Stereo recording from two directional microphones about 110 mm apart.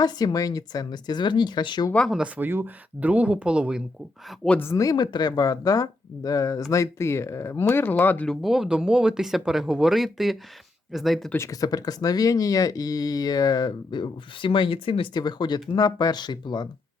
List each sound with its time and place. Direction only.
0.0 s speech: 40° left (ahead or behind)
2.0 s speech: 10° right (ahead or behind)
4.4 s speech: 15° left (ahead or behind)
4.7 s speech: 35° left (ahead or behind); by 8.3 s 15° left (ahead or behind)
8.3 s speech: centre (ahead or behind)
11.3 s speech: 30° left (ahead or behind)